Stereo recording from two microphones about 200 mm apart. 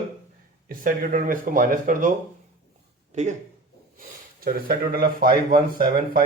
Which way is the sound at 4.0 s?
45° right (ahead or behind).